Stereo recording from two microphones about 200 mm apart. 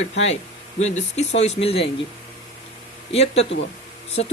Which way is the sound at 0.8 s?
35° left (ahead or behind).